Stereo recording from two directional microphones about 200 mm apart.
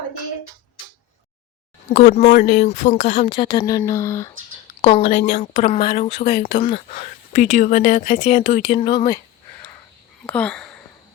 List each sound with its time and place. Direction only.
1.9 s speech: 40° left (ahead or behind); by 4.3 s 15° left (ahead or behind)
4.8 s speech: 30° left (ahead or behind)
8.9 s speech: 20° left (ahead or behind)
10.2 s speech: 5° left (ahead or behind)